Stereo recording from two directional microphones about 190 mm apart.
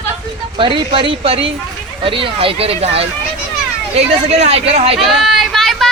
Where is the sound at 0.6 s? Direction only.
25° right (ahead or behind).